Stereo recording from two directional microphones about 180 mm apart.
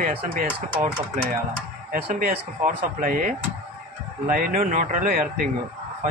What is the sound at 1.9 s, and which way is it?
Speech, 50° right (ahead or behind).